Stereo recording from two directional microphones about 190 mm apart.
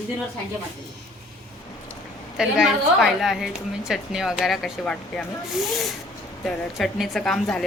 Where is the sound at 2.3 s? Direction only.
Centre (ahead or behind).